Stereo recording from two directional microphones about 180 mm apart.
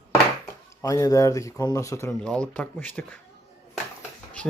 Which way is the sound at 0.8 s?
20° left (ahead or behind).